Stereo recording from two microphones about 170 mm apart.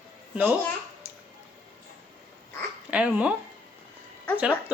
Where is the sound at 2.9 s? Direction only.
10° right (ahead or behind).